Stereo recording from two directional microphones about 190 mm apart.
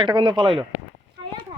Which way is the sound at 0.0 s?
25° right (ahead or behind).